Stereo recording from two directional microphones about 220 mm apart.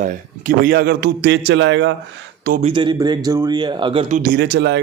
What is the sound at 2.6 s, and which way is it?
Speech, 20° right (ahead or behind).